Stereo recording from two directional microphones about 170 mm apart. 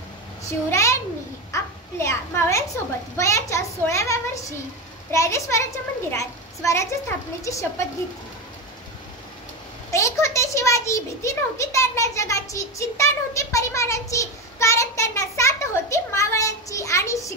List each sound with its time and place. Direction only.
0.7 s a child's voice: 15° left (ahead or behind)
9.8 s a child's voice: 15° left (ahead or behind)